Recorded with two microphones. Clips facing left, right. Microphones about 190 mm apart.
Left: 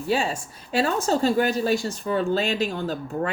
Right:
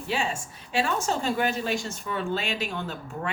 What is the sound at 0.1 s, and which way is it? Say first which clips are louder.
Speech: left 5 dB; 40° left (ahead or behind).